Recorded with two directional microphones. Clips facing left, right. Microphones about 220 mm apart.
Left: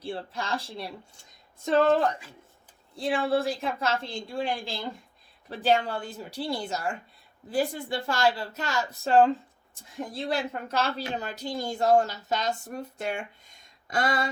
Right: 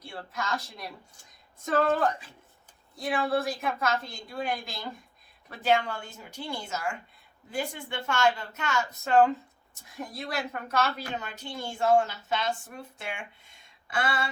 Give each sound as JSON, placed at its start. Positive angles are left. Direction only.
{"t": 0.0, "sound": "a woman's voice", "side_deg": 30}
{"t": 2.9, "sound": "a woman's voice", "side_deg": 30}